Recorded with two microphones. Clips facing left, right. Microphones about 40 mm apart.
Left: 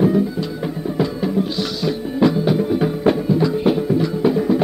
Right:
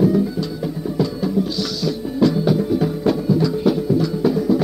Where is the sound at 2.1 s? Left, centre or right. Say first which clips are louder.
Even; left.